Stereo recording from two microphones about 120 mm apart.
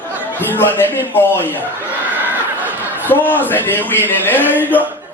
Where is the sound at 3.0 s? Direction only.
15° left (ahead or behind).